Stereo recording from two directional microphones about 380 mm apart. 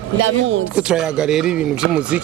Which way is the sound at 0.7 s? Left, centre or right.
Centre.